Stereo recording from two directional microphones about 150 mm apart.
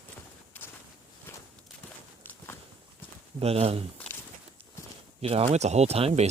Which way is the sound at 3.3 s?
45° right (ahead or behind).